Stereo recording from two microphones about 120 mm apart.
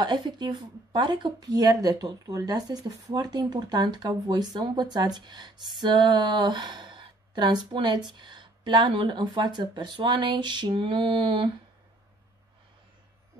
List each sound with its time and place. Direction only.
0.0 s speech: 40° right (ahead or behind)